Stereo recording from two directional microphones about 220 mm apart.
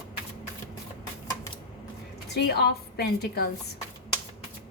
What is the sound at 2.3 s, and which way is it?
A woman's voice, 45° left (ahead or behind).